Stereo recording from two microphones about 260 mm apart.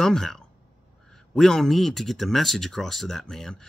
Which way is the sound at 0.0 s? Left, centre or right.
Centre.